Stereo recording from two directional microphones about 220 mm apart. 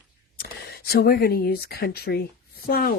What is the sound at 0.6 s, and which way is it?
Speech, 45° left (ahead or behind).